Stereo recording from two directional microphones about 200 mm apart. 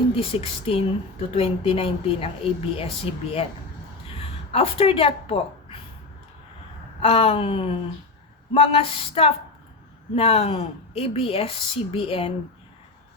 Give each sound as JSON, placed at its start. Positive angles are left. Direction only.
{"t": 0.1, "sound": "speech", "side_deg": 30}
{"t": 4.2, "sound": "speech", "side_deg": 30}
{"t": 7.0, "sound": "speech", "side_deg": 30}